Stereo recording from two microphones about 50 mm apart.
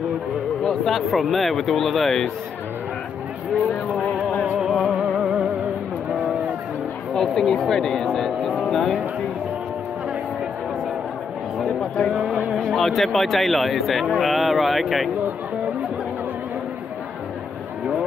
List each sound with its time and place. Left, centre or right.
0.7 s speech: centre
4.8 s music: centre
6.1 s a sound: centre
7.2 s speech: centre
12.1 s a sound: centre
12.6 s speech: centre